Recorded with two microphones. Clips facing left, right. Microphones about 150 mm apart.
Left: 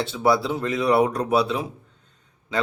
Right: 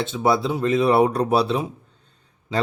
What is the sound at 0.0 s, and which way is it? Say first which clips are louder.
Speech: even; 20° right (ahead or behind).